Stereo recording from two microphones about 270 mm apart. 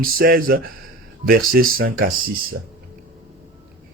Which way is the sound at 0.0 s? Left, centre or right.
Right.